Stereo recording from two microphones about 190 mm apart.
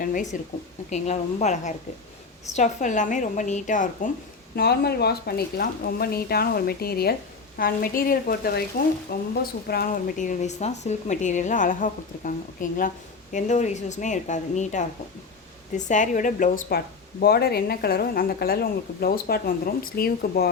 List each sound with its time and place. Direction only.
0.0 s a woman's voice: 45° left (ahead or behind)
4.5 s a woman's voice: 55° left (ahead or behind)